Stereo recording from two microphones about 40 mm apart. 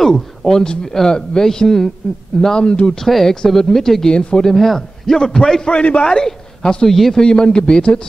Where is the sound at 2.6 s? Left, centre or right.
Left.